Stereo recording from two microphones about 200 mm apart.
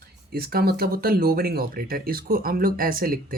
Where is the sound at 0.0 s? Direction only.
50° right (ahead or behind).